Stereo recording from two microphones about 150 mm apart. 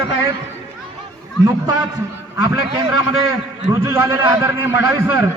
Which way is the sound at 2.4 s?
25° right (ahead or behind).